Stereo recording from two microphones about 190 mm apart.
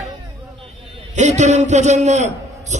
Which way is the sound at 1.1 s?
35° right (ahead or behind).